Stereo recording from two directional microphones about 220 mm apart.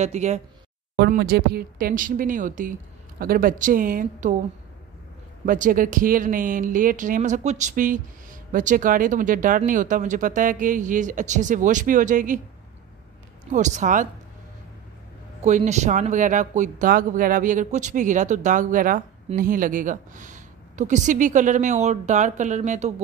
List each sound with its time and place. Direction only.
0.0 s speech: 30° right (ahead or behind)
0.9 s speech: 45° right (ahead or behind)
5.4 s speech: 40° right (ahead or behind)
13.5 s speech: 35° right (ahead or behind)
15.4 s speech: 30° right (ahead or behind)